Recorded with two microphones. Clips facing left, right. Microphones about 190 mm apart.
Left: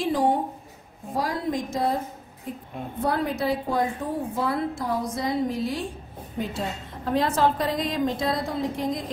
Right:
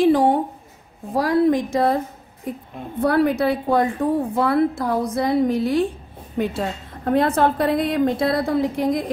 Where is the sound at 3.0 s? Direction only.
65° right (ahead or behind).